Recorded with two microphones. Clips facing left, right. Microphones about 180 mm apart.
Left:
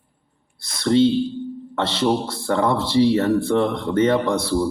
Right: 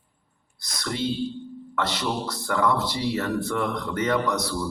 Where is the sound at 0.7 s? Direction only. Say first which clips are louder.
Left 11 dB; 30° left (ahead or behind).